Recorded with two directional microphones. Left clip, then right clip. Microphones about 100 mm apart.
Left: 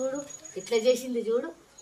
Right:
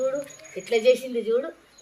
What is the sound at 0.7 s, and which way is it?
Speech, 30° left (ahead or behind).